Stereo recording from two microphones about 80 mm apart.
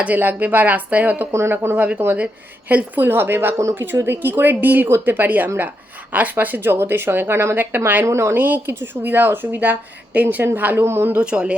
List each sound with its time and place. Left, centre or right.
0.0 s speech: right
1.3 s speech: right
8.0 s speech: right
8.4 s speech: right
11.2 s speech: centre